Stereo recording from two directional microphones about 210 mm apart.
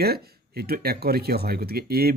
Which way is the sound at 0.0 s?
50° right (ahead or behind).